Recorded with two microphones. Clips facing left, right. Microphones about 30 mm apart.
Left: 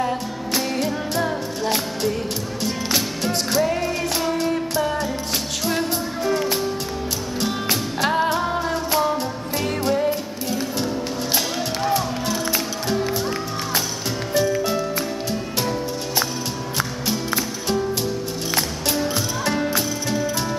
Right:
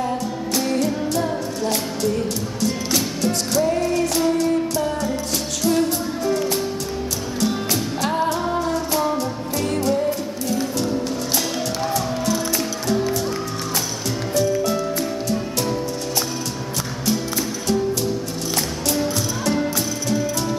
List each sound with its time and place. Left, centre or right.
0.6 s music: centre
3.2 s music: left
11.9 s music: centre
14.8 s music: centre
19.6 s music: centre